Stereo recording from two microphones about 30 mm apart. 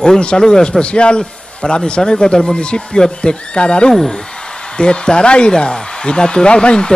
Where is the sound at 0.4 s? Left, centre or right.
Left.